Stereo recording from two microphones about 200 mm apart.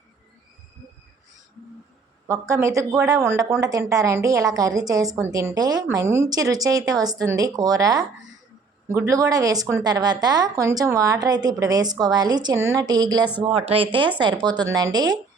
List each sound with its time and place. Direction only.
2.2 s a woman's voice: 15° right (ahead or behind)